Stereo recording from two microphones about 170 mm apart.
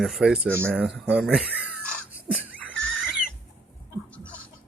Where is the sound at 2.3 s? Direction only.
10° right (ahead or behind).